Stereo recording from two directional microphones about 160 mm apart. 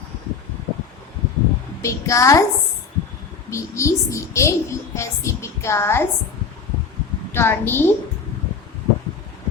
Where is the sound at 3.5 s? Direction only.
20° left (ahead or behind).